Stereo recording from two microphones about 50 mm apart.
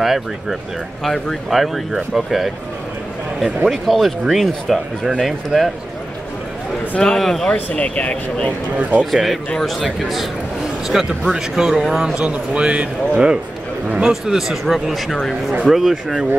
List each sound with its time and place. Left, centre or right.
0.0 s speech: centre
3.7 s speech: centre
7.0 s a man's voice: centre
7.7 s speech: left
9.1 s speech: centre
12.3 s speech: right
14.6 s speech: centre